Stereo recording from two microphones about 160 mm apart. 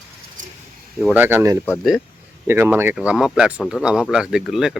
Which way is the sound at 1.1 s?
15° right (ahead or behind).